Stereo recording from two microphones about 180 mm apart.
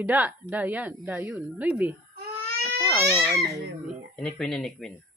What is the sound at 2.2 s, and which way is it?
Crying, 60° right (ahead or behind).